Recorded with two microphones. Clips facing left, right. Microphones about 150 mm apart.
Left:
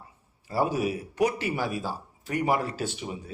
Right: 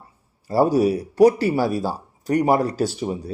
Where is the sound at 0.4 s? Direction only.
40° right (ahead or behind).